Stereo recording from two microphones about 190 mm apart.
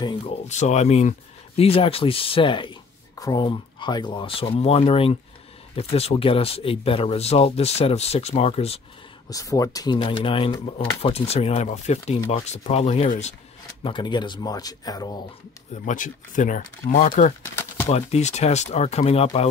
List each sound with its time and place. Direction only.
0.0 s speech: 35° left (ahead or behind)
9.3 s speech: 20° left (ahead or behind); by 13.3 s 35° left (ahead or behind)
13.8 s speech: 25° left (ahead or behind)
15.7 s speech: 40° left (ahead or behind)